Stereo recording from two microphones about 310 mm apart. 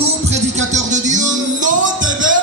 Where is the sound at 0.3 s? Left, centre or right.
Right.